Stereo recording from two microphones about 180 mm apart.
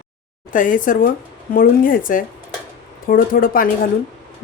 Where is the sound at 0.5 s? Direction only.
45° left (ahead or behind).